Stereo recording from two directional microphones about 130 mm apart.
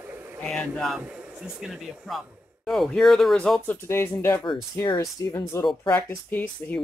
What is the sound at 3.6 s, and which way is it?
Speech, 20° left (ahead or behind).